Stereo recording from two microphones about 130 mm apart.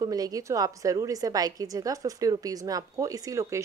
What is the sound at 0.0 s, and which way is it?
A woman's voice, 30° right (ahead or behind).